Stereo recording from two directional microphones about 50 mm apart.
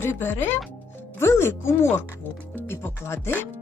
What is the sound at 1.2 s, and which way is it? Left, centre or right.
Speech, left.